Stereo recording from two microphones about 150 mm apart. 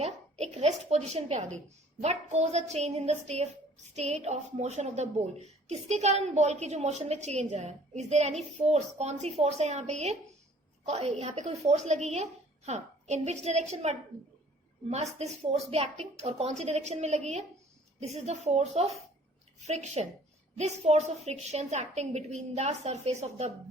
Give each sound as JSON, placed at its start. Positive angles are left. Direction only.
{"t": 0.0, "sound": "a woman's voice", "side_deg": -45}